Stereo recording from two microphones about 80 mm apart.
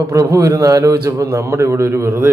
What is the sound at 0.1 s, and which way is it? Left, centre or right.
A man's voice, right.